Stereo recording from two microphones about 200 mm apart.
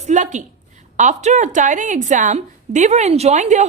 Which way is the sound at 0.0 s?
35° right (ahead or behind).